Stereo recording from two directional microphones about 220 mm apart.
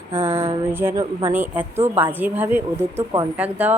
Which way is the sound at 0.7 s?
10° right (ahead or behind).